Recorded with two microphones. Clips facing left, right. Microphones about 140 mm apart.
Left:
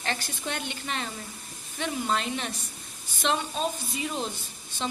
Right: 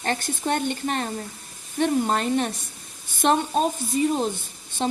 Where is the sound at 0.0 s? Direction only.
50° right (ahead or behind).